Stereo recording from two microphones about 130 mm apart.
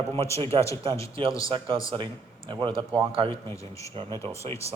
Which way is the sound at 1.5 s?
40° right (ahead or behind).